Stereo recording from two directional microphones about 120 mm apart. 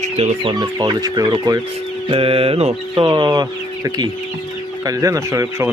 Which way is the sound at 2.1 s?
50° right (ahead or behind).